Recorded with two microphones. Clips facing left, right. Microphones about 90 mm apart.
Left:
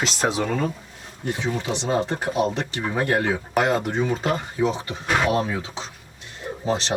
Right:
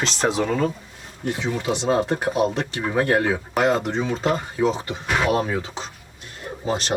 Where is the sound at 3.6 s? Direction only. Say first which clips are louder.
Right 4 dB; 25° right (ahead or behind).